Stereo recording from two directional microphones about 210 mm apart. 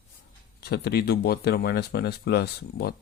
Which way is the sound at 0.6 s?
50° left (ahead or behind).